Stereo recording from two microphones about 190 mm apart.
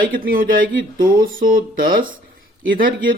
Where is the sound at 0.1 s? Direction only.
50° right (ahead or behind).